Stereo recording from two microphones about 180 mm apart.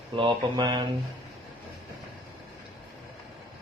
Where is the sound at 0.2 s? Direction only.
25° right (ahead or behind).